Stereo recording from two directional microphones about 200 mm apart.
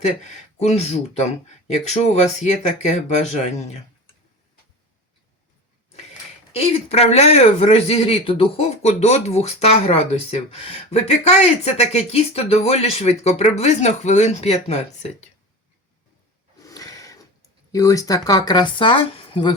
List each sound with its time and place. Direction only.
0.6 s speech: 30° left (ahead or behind)
6.5 s speech: 30° left (ahead or behind)
16.6 s a sound: 15° left (ahead or behind)
17.7 s speech: 15° left (ahead or behind)